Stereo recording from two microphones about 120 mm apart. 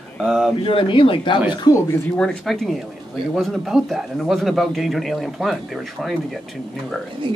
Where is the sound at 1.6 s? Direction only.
25° left (ahead or behind).